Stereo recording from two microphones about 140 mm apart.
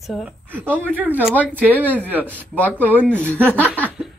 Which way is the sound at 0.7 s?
10° right (ahead or behind).